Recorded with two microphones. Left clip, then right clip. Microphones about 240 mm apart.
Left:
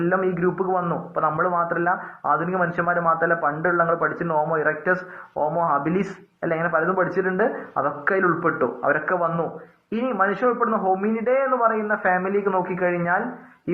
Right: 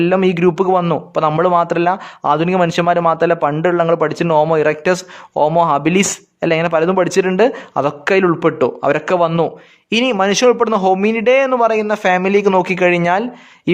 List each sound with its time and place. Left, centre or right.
0.0 s a man's voice: right
7.7 s a man's voice: right